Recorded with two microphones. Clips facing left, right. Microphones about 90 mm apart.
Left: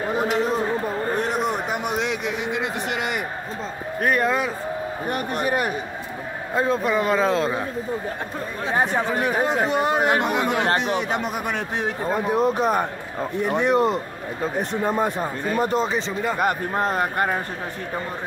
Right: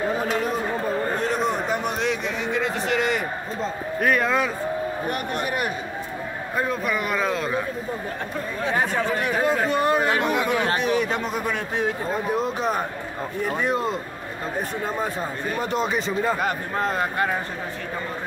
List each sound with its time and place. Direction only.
0.2 s chatter: 20° left (ahead or behind)
1.3 s a sound: 10° left (ahead or behind)
4.0 s speech: centre (ahead or behind)
5.1 s speech: 35° left (ahead or behind)
8.7 s speech: 25° left (ahead or behind)
13.4 s speech: 60° left (ahead or behind)
14.7 s speech: 20° left (ahead or behind)
15.5 s speech: 40° left (ahead or behind)
16.8 s speech: 30° left (ahead or behind)